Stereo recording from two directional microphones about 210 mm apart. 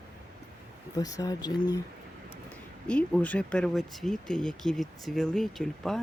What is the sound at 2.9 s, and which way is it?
Speech, 5° left (ahead or behind).